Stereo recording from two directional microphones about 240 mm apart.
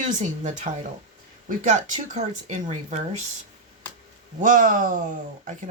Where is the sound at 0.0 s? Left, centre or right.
Right.